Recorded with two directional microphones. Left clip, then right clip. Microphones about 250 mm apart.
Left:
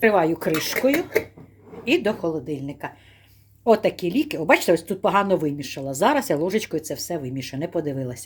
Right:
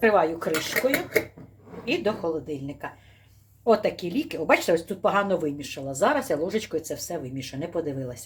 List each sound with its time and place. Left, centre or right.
0.0 s speech: left
0.8 s speech: centre
1.8 s speech: left